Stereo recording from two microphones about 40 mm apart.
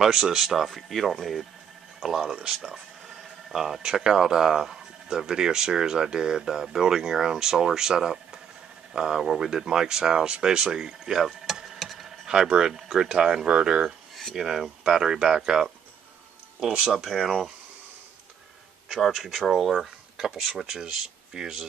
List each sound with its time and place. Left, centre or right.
0.0 s speech: centre
2.0 s speech: centre
11.5 s a sound: centre
11.8 s a sound: centre
12.4 s speech: right
16.8 s speech: centre
19.2 s speech: centre